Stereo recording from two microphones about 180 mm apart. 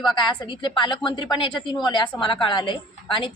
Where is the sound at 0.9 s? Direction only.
25° left (ahead or behind).